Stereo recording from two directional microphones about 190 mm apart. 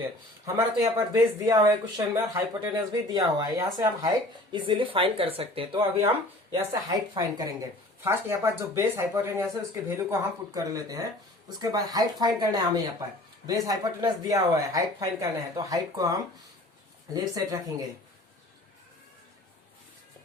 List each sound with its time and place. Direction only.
0.4 s speech: 15° right (ahead or behind)